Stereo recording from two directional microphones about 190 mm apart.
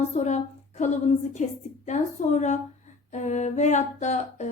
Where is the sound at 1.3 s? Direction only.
40° left (ahead or behind).